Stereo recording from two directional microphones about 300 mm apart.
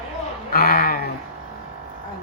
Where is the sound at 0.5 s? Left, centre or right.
Left.